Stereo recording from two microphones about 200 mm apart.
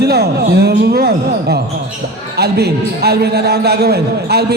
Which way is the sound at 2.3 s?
55° right (ahead or behind).